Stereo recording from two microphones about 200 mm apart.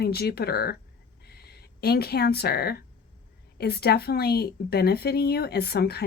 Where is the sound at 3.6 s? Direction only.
55° left (ahead or behind).